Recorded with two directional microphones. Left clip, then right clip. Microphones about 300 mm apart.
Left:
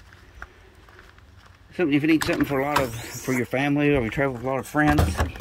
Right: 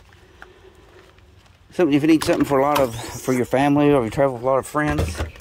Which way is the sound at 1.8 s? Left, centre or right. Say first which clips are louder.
Right 4 dB; centre.